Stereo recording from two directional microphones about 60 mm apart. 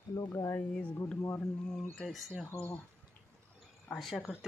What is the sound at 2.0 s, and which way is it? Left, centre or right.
Speech, centre.